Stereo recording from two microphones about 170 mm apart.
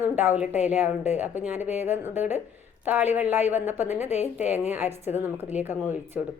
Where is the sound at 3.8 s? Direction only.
40° left (ahead or behind).